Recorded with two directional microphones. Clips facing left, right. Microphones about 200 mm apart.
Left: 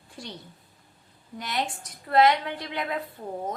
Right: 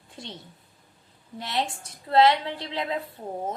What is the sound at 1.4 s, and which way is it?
Speech, 30° right (ahead or behind).